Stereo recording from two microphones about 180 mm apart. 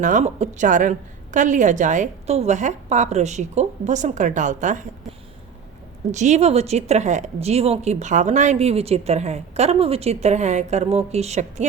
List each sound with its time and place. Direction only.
0.0 s a woman's voice: 45° right (ahead or behind)
6.1 s speech: 40° right (ahead or behind)